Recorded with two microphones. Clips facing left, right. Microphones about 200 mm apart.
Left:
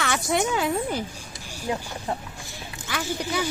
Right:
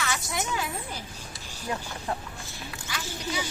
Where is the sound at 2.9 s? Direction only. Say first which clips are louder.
Left 7 dB; 60° left (ahead or behind).